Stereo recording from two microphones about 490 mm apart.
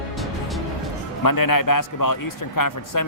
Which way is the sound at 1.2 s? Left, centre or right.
Left.